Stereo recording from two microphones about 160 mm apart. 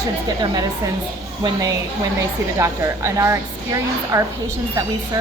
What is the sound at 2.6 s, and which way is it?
A woman's voice, 20° right (ahead or behind).